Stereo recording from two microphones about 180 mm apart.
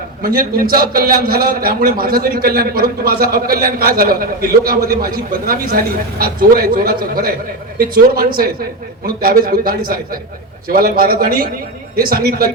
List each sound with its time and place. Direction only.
0.2 s a man's voice: 55° right (ahead or behind)